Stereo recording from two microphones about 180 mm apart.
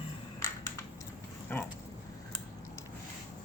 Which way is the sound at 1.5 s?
10° left (ahead or behind).